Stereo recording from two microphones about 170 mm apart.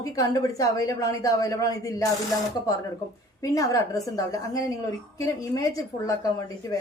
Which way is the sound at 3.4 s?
20° left (ahead or behind).